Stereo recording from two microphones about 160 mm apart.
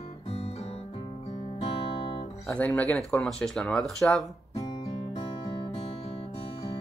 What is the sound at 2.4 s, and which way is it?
Speech, 10° left (ahead or behind).